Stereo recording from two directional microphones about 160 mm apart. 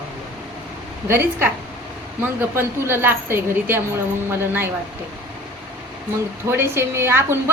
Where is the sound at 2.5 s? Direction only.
15° right (ahead or behind).